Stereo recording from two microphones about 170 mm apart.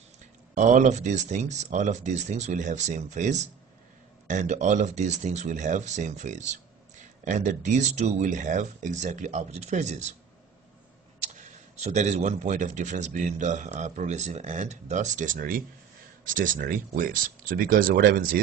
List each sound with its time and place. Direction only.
0.6 s speech: 45° right (ahead or behind)
11.7 s speech: 40° right (ahead or behind); by 18.4 s 55° right (ahead or behind)